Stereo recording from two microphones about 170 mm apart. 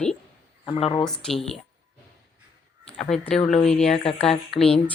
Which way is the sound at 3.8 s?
35° left (ahead or behind).